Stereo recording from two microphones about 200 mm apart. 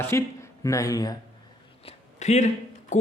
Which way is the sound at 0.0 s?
15° left (ahead or behind).